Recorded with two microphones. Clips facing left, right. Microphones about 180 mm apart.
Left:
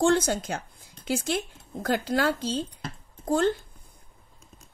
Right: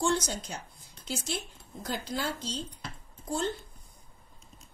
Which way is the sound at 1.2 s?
90° left.